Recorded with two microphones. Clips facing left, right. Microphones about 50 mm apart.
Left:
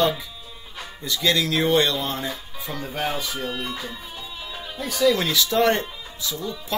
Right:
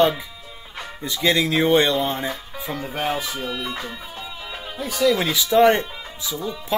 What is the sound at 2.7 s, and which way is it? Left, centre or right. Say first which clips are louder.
Speech: right 2 dB; centre.